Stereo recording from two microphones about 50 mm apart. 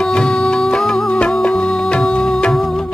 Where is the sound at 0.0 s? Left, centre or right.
Centre.